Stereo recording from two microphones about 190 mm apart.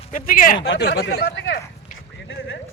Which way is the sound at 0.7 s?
60° left (ahead or behind).